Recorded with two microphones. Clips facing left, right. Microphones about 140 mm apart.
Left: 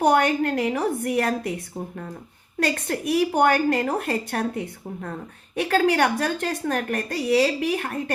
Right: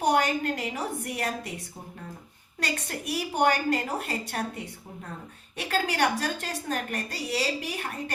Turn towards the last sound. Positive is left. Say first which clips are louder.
# left 9 dB
turn(degrees=55)  # may be behind; listen again after turning